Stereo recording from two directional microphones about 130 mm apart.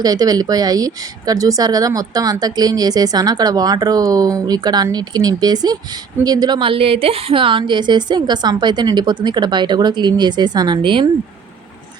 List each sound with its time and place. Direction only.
0.0 s a woman's voice: 30° right (ahead or behind)